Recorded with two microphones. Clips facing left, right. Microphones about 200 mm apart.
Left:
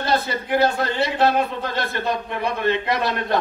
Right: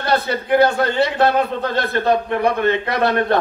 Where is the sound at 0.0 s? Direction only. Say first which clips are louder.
Right 3 dB; 60° right (ahead or behind).